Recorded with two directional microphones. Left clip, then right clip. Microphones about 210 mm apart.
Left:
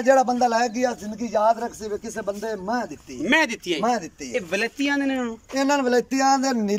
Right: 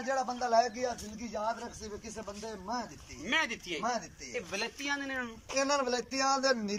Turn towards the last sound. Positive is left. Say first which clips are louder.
# left 9 dB
turn(degrees=45)  # may be behind; listen again after turning